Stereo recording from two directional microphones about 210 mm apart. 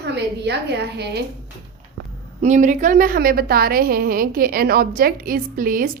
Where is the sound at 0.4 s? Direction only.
50° right (ahead or behind).